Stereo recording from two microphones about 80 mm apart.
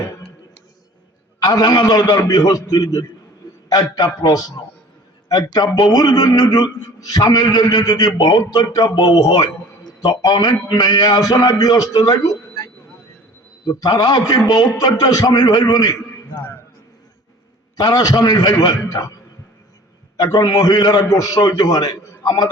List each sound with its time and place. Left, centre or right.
1.4 s a man's voice: left
16.3 s a sound: left
17.7 s a man's voice: left
20.1 s a man's voice: left